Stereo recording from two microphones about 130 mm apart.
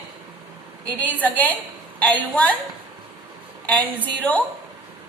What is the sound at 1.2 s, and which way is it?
A woman's voice, 10° left (ahead or behind).